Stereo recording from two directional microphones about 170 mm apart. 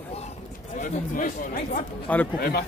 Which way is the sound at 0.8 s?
50° left (ahead or behind).